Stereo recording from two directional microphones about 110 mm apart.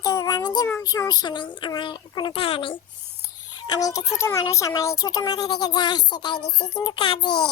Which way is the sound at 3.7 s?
30° left (ahead or behind).